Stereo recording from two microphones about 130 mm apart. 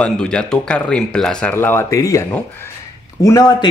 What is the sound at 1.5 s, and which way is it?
Speech, 15° left (ahead or behind).